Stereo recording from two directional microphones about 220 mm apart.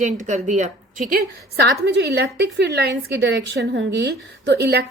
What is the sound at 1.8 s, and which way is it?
A woman's voice, 50° right (ahead or behind).